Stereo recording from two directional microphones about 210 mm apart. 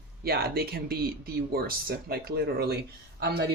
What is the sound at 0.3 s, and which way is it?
A man's voice, 50° right (ahead or behind).